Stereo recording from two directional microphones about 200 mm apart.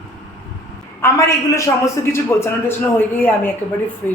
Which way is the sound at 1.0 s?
15° left (ahead or behind).